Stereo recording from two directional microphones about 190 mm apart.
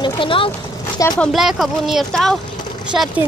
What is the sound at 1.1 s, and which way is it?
Speech, centre (ahead or behind).